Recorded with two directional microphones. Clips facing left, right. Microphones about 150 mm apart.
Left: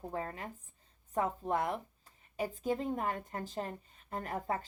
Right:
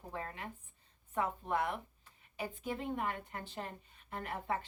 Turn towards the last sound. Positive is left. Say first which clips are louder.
# left 2 dB
turn(degrees=40)  # may be behind; listen again after turning